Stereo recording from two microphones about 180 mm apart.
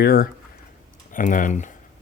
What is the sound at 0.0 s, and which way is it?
Speech, 55° left (ahead or behind).